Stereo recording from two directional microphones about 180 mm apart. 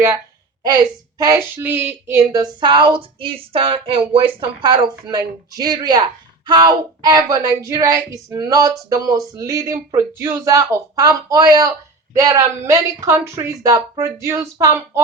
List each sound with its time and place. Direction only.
0.6 s a woman's voice: 20° right (ahead or behind)